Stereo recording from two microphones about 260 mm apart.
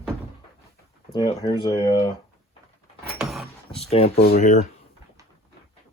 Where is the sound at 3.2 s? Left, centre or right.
Centre.